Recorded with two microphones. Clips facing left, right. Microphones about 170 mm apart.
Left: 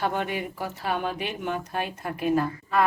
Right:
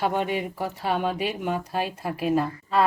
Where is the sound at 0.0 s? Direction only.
25° right (ahead or behind).